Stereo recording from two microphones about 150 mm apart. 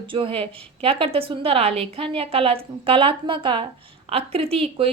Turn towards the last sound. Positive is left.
turn(degrees=-40)  # may be behind; listen again after turning